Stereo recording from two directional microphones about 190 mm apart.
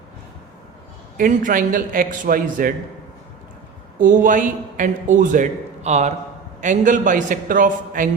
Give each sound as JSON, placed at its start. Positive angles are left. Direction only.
{"t": 1.1, "sound": "a man's voice", "side_deg": -45}
{"t": 4.0, "sound": "a man's voice", "side_deg": -45}